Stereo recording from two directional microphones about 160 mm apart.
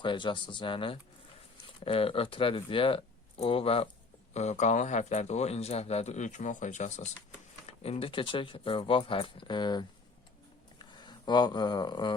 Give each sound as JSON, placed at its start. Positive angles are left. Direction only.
{"t": 0.0, "sound": "speech", "side_deg": 30}